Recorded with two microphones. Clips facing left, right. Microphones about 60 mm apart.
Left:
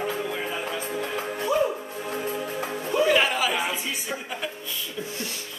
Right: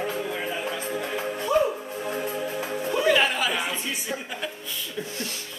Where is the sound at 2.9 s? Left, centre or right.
Centre.